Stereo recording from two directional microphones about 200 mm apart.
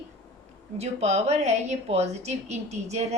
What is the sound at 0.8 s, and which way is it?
A woman's voice, 35° right (ahead or behind).